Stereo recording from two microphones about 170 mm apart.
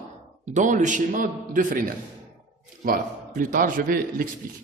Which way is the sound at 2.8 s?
55° right (ahead or behind).